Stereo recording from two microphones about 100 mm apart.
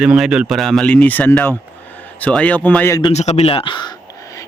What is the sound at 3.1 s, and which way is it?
Speech, 90° left.